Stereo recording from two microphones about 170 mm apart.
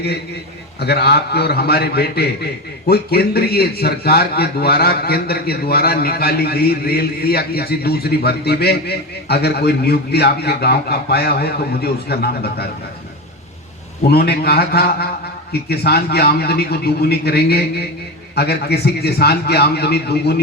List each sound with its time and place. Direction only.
0.8 s a man's voice: 75° left (ahead or behind)
14.1 s a man's voice: 65° left (ahead or behind)